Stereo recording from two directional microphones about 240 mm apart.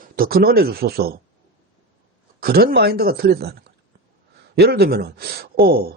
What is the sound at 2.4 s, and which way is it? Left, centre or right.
A man's voice, right.